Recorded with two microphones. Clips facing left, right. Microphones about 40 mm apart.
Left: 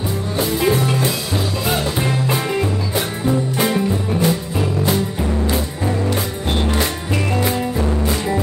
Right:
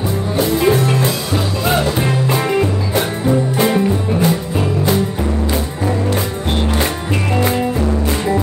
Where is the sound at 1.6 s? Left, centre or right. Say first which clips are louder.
Right 5 dB; centre.